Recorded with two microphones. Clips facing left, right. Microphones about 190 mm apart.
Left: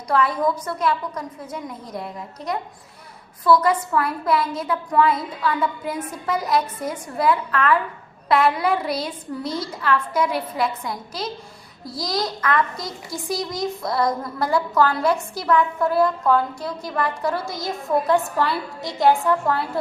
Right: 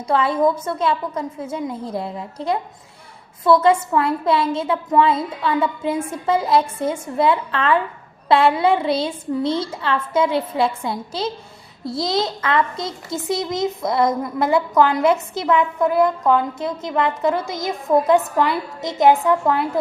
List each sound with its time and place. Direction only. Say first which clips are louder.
0.1 s a child's voice: right 3 dB; 25° right (ahead or behind)